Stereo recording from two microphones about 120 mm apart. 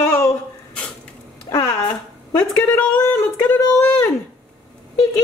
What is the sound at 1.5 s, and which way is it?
Speech, 25° left (ahead or behind).